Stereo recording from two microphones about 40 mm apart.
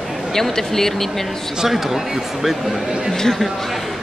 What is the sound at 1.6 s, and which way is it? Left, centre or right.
Speech, centre.